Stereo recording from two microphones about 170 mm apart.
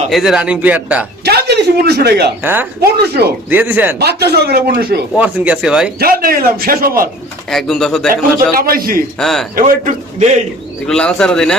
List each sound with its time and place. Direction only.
0.1 s a man's voice: centre (ahead or behind)
1.2 s a man's voice: 70° right (ahead or behind)
2.4 s a man's voice: 10° right (ahead or behind)
2.8 s speech: 70° right (ahead or behind)
3.5 s a man's voice: 10° right (ahead or behind)
3.9 s speech: 70° right (ahead or behind)
5.1 s a man's voice: 10° right (ahead or behind)
6.0 s a man's voice: 60° right (ahead or behind)
7.5 s speech: 5° left (ahead or behind)
8.5 s a man's voice: 60° right (ahead or behind)
9.1 s speech: centre (ahead or behind)
9.6 s a man's voice: 45° right (ahead or behind)
10.8 s speech: 5° left (ahead or behind)